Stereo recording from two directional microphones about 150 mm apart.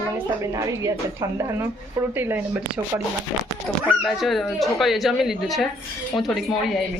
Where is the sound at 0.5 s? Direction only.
20° right (ahead or behind).